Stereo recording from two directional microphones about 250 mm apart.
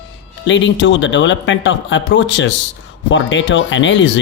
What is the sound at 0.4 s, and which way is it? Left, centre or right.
Speech, left.